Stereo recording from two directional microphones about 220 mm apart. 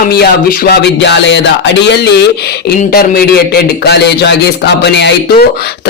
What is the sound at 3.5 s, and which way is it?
Speech, 50° left (ahead or behind).